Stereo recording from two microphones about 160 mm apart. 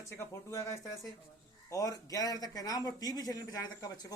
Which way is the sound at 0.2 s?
20° left (ahead or behind).